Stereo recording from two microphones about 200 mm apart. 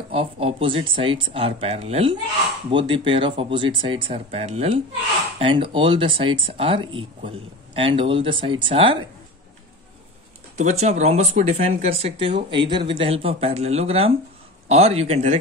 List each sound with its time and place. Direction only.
0.1 s speech: 30° right (ahead or behind)
10.6 s speech: 35° right (ahead or behind)